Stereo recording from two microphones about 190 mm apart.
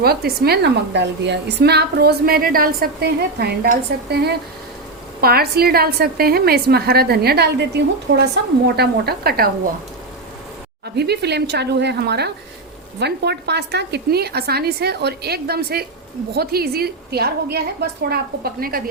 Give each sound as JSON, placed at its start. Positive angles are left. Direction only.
{"t": 0.0, "sound": "a woman's voice", "side_deg": -55}
{"t": 10.9, "sound": "a woman's voice", "side_deg": -60}